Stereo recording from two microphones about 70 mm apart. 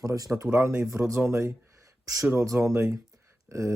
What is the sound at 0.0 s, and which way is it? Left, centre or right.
Speech, right.